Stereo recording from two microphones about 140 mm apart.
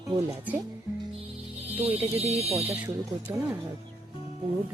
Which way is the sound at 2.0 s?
45° right (ahead or behind).